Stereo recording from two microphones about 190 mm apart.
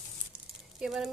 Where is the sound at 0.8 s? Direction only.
5° right (ahead or behind).